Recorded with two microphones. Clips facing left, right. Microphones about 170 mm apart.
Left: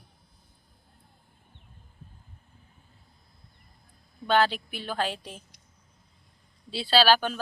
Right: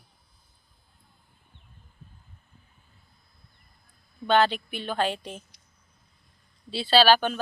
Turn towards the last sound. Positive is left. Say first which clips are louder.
# right 2 dB
turn(degrees=5)  # may be behind; listen again after turning